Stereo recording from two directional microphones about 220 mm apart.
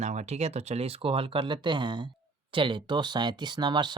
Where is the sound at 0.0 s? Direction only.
30° right (ahead or behind).